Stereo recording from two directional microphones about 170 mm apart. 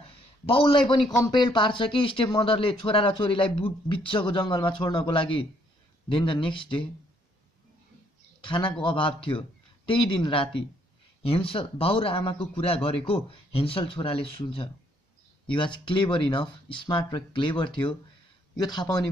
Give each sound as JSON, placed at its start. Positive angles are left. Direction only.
{"t": 0.0, "sound": "a sound", "side_deg": 30}
{"t": 1.2, "sound": "speech", "side_deg": 25}
{"t": 8.4, "sound": "speech", "side_deg": 30}